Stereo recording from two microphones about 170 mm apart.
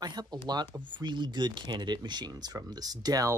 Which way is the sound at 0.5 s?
25° right (ahead or behind).